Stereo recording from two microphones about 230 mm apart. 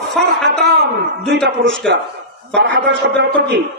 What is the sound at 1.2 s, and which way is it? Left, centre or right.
Shofar, right.